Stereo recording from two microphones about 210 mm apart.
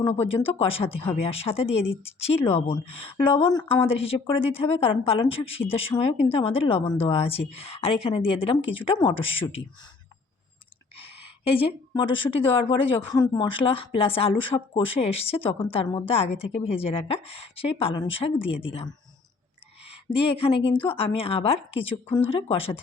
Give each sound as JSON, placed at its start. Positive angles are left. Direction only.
{"t": 0.3, "sound": "a woman's voice", "side_deg": 25}
{"t": 10.9, "sound": "a woman's voice", "side_deg": 25}